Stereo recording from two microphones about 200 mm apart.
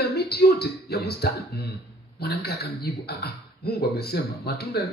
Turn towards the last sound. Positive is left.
turn(degrees=50)  # may be behind; listen again after turning